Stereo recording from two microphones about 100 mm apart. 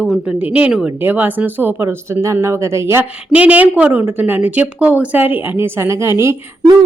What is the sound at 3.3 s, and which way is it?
A woman's voice, 15° right (ahead or behind).